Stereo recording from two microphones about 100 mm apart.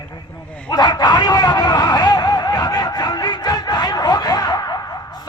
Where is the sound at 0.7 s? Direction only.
45° left (ahead or behind).